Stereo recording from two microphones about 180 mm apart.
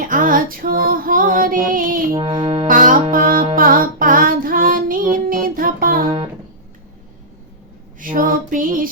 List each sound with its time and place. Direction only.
0.0 s female singing: 50° right (ahead or behind)
2.1 s music: 30° right (ahead or behind)
2.6 s music: 45° right (ahead or behind)
3.5 s female singing: 50° right (ahead or behind)
7.9 s music: 50° right (ahead or behind)